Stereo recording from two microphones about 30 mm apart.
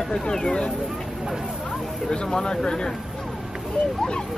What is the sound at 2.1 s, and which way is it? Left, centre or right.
Speech, left.